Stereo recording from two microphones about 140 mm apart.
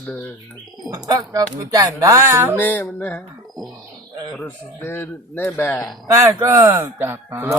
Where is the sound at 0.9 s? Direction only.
25° right (ahead or behind).